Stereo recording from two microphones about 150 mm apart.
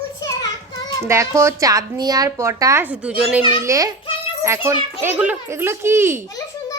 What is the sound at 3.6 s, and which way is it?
A child's voice, 20° right (ahead or behind).